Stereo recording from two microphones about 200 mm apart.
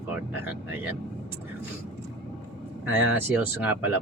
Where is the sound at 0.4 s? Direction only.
10° right (ahead or behind).